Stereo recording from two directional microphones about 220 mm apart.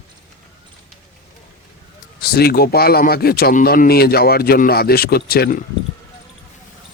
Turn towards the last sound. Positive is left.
turn(degrees=45)  # may be behind; listen again after turning